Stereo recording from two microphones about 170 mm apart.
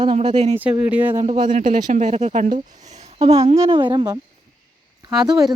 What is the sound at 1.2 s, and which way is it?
Speech, 45° right (ahead or behind).